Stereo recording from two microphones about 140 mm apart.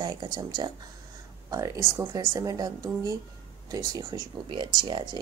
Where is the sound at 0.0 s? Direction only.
30° right (ahead or behind).